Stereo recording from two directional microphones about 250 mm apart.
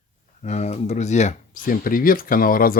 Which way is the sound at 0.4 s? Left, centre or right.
Left.